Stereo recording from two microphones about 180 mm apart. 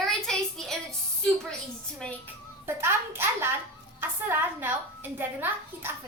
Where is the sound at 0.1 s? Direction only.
Centre (ahead or behind).